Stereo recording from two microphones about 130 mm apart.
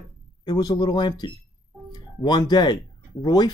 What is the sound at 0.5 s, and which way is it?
Speech, 30° left (ahead or behind).